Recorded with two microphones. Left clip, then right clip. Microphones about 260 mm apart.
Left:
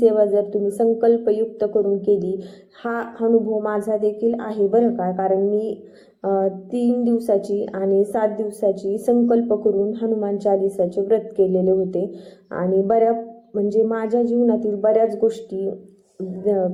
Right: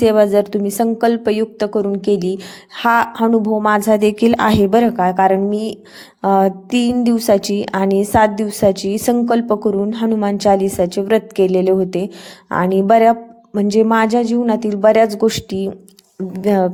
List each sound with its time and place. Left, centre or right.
0.0 s a woman's voice: right